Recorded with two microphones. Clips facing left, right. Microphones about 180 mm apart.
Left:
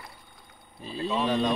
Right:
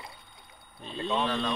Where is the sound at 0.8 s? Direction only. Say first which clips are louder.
Left 2 dB; 5° left (ahead or behind).